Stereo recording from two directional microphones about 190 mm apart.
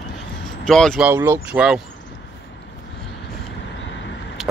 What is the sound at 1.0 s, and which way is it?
Speech, 10° right (ahead or behind).